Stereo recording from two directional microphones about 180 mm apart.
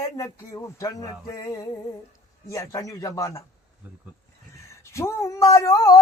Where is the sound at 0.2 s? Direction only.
20° left (ahead or behind).